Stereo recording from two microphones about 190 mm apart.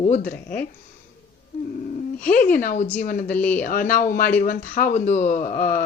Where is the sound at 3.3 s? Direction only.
10° left (ahead or behind).